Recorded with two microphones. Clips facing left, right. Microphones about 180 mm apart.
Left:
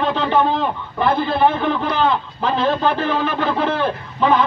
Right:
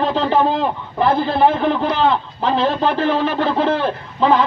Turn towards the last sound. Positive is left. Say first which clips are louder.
# right 1 dB
turn(degrees=-30)  # may be behind; listen again after turning